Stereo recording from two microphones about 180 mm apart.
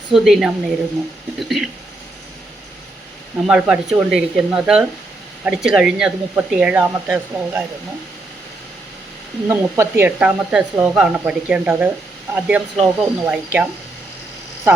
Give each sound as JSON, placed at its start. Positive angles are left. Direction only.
{"t": 0.1, "sound": "speech", "side_deg": 0}
{"t": 3.4, "sound": "speech", "side_deg": -5}
{"t": 9.5, "sound": "speech", "side_deg": -15}